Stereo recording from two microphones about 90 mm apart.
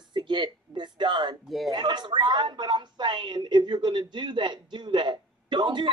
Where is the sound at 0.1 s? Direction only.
55° right (ahead or behind).